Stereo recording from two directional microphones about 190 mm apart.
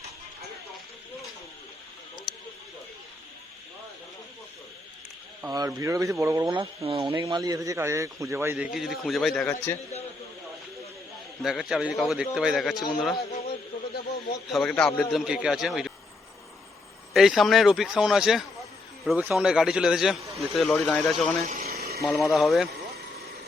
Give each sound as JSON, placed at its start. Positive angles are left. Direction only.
{"t": 5.4, "sound": "speech", "side_deg": -20}
{"t": 8.7, "sound": "a man's voice", "side_deg": 0}
{"t": 11.4, "sound": "a man's voice", "side_deg": 0}
{"t": 12.7, "sound": "a man's voice", "side_deg": 20}
{"t": 13.5, "sound": "a sound", "side_deg": 55}
{"t": 14.5, "sound": "a man's voice", "side_deg": 5}
{"t": 17.2, "sound": "a man's voice", "side_deg": 0}
{"t": 21.6, "sound": "a sound", "side_deg": -55}
{"t": 22.0, "sound": "a man's voice", "side_deg": 0}